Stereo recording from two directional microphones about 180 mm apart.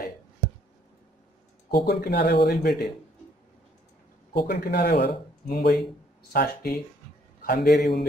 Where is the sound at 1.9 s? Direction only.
65° left (ahead or behind).